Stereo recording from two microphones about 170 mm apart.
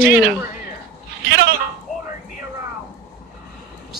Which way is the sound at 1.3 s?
70° right (ahead or behind).